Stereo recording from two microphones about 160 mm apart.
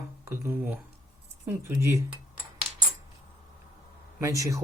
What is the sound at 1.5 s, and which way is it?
Speech, 15° right (ahead or behind).